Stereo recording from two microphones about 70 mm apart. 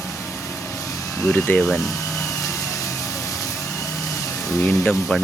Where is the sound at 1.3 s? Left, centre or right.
Left.